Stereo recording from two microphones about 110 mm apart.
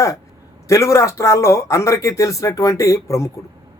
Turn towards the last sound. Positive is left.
turn(degrees=25)  # may be behind; listen again after turning